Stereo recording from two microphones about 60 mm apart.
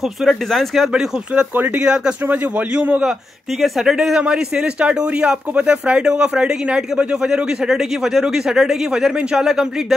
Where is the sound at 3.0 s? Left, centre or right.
Centre.